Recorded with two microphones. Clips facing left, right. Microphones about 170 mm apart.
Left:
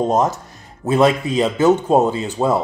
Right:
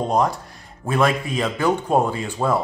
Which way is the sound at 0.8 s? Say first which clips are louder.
Left 5 dB; 25° left (ahead or behind).